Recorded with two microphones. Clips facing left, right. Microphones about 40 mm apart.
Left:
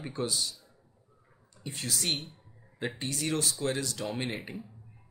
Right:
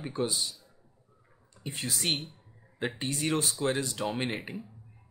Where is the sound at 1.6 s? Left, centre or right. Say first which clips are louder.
Right 1 dB; centre.